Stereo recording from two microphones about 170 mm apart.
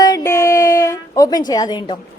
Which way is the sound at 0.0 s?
20° left (ahead or behind).